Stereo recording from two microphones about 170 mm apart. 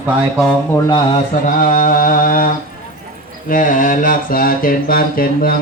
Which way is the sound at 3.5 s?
50° left (ahead or behind).